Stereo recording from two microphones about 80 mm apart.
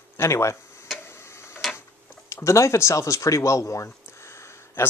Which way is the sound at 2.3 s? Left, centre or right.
Left.